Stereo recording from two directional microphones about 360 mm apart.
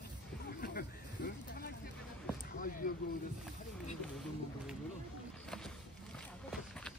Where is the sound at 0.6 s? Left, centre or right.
Left.